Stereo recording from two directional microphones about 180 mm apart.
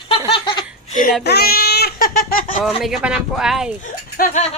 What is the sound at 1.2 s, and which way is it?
Speech, 60° left (ahead or behind).